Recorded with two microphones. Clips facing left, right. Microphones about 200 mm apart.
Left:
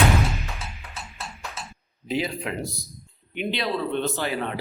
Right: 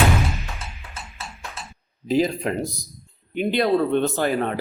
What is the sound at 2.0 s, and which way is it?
Speech, 40° right (ahead or behind).